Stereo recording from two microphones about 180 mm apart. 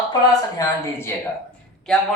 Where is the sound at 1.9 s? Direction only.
Centre (ahead or behind).